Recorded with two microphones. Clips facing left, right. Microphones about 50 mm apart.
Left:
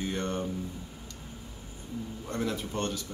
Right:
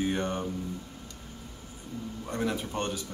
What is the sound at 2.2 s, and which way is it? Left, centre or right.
Speech, centre.